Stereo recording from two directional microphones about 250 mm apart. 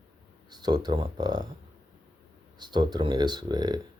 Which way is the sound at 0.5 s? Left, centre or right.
Centre.